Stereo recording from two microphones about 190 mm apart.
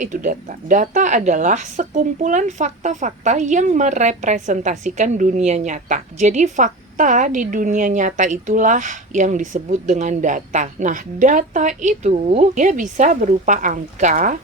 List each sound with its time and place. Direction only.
0.0 s speech: 45° right (ahead or behind)